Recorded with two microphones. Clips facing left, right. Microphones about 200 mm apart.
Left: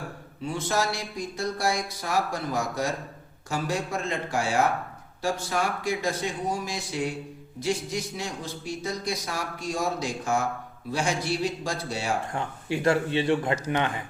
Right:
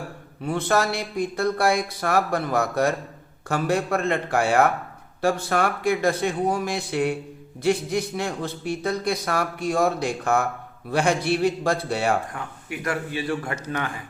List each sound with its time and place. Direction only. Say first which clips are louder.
0.4 s a man's voice: right 5 dB; 60° right (ahead or behind)
12.3 s a man's voice: left 4 dB; 30° left (ahead or behind)